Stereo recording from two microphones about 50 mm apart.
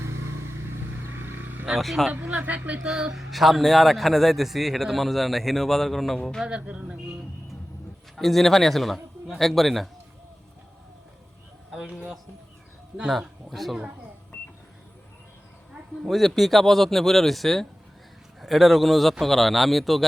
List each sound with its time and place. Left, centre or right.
1.0 s vehicle: right
1.8 s a man's voice: centre
2.2 s speech: right
2.8 s speech: centre
3.2 s a man's voice: centre
6.4 s speech: right
8.1 s a man's voice: centre
11.7 s a sound: centre
13.5 s a man's voice: centre
16.0 s a man's voice: centre